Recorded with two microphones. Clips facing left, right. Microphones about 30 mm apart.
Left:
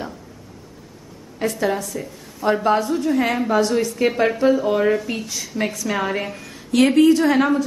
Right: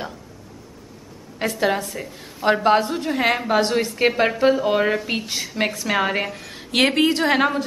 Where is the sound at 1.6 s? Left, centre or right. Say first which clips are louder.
Right 3 dB; right.